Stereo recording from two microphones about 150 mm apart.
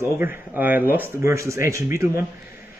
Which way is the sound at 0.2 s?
15° right (ahead or behind).